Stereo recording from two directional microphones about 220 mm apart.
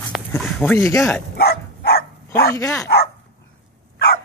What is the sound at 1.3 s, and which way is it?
Dog, 45° left (ahead or behind).